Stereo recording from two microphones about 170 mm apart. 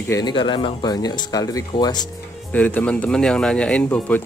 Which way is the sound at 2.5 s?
10° left (ahead or behind).